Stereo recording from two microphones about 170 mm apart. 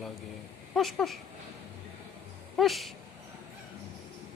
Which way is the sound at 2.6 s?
Centre (ahead or behind).